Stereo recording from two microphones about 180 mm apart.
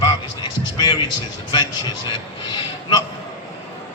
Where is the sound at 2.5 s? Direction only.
20° left (ahead or behind).